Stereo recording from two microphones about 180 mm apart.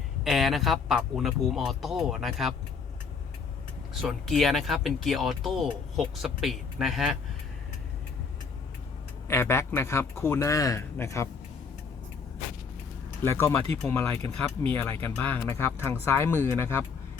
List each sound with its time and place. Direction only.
0.3 s speech: centre (ahead or behind)
4.0 s speech: centre (ahead or behind)
9.2 s a man's voice: 15° left (ahead or behind)
13.2 s a man's voice: 15° left (ahead or behind)
14.2 s speech: 30° right (ahead or behind)
14.7 s a man's voice: 10° left (ahead or behind)